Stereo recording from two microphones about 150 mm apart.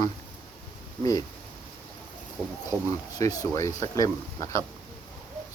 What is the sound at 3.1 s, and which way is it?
Speech, 25° left (ahead or behind).